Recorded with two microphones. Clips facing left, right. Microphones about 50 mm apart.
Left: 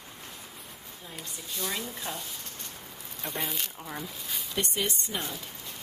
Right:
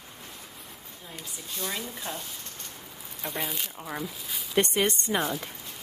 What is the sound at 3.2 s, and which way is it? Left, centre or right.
Speech, centre.